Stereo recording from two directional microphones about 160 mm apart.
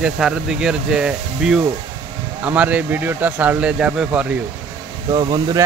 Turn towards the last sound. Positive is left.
turn(degrees=-25)  # may be behind; listen again after turning